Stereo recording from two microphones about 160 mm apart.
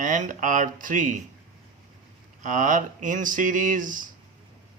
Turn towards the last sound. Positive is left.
turn(degrees=-55)  # may be behind; listen again after turning